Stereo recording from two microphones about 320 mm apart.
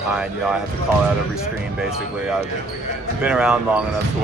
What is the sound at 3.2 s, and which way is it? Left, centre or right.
Speech, centre.